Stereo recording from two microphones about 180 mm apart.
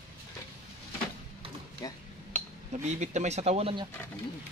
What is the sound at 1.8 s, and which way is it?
Speech, 20° left (ahead or behind).